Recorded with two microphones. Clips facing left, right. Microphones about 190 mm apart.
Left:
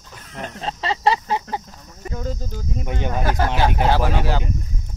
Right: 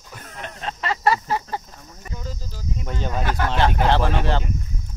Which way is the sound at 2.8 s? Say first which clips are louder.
Left 3 dB; 15° left (ahead or behind).